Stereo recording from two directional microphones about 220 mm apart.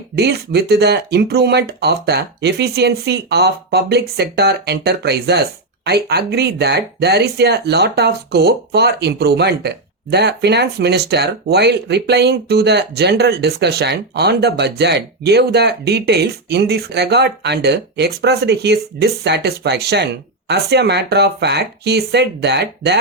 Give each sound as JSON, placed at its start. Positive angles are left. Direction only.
{"t": 0.2, "sound": "speech", "side_deg": -50}